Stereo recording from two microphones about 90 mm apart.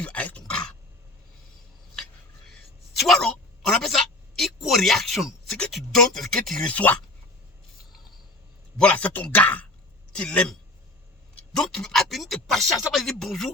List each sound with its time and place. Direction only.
0.0 s speech: 15° left (ahead or behind)
3.0 s a sound: 5° left (ahead or behind)
5.7 s speech: 5° left (ahead or behind)
6.7 s speech: 15° left (ahead or behind)
8.8 s a man's voice: 15° left (ahead or behind)